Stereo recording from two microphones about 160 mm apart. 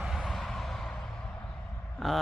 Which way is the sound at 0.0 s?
Centre (ahead or behind).